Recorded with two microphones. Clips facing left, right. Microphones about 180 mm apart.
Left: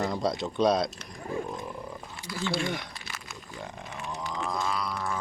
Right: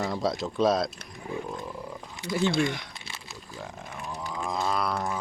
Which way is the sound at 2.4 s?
20° right (ahead or behind).